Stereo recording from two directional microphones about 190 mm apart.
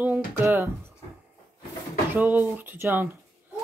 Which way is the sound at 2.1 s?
10° right (ahead or behind).